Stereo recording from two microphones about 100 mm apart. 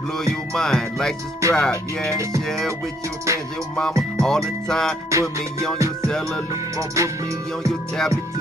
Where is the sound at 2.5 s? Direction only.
5° left (ahead or behind).